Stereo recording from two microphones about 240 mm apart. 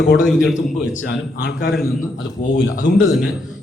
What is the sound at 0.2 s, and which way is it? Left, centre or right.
Speech, centre.